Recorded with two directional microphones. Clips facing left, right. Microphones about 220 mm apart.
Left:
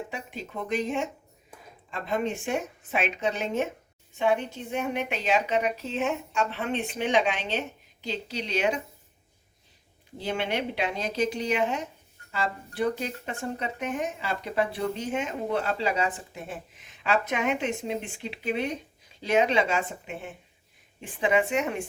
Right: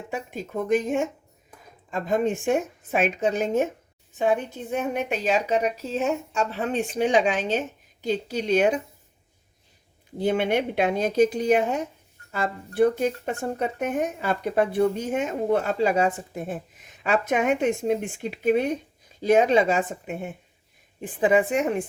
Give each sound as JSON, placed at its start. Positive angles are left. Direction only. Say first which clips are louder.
{"t": 0.1, "sound": "speech", "louder": "right 6 dB", "side_deg": -45}
{"t": 10.2, "sound": "speech", "louder": "right 7 dB", "side_deg": -50}
{"t": 21.2, "sound": "speech", "louder": "right 4 dB", "side_deg": -45}